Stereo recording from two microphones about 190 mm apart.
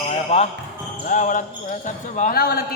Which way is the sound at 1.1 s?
40° left (ahead or behind).